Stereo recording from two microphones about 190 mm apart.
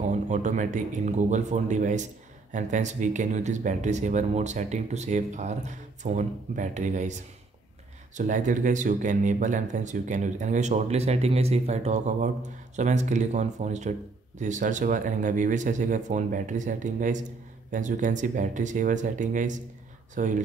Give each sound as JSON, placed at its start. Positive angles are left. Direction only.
{"t": 0.0, "sound": "speech", "side_deg": -40}